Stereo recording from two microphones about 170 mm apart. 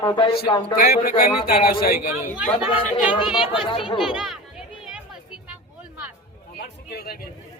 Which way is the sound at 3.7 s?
30° left (ahead or behind).